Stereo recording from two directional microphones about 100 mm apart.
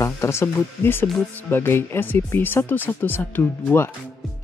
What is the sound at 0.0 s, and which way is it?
Speech, 30° left (ahead or behind).